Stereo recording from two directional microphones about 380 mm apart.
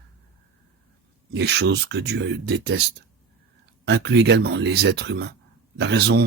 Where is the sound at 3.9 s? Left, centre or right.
Right.